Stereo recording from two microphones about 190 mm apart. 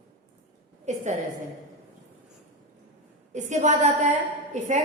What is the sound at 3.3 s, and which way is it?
A woman's voice, 40° right (ahead or behind).